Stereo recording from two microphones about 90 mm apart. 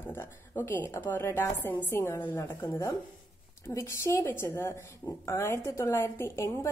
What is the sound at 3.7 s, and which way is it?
A woman's voice, 35° left (ahead or behind).